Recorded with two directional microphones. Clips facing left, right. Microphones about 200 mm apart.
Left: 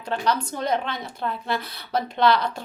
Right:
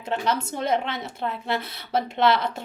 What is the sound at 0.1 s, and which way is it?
A woman's voice, 25° right (ahead or behind).